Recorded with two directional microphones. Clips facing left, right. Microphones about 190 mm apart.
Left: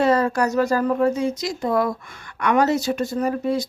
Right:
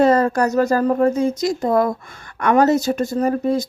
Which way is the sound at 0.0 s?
45° right (ahead or behind).